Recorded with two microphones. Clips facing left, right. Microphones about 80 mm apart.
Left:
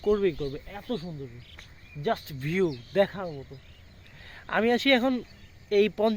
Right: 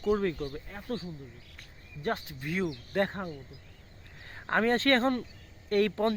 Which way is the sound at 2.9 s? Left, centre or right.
Right.